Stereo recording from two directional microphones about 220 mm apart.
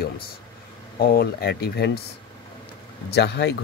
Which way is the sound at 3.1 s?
50° left (ahead or behind).